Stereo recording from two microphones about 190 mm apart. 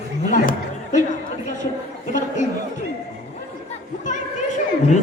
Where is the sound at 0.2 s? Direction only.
45° left (ahead or behind).